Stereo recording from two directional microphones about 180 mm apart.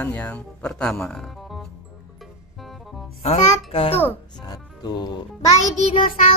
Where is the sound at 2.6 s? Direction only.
Centre (ahead or behind).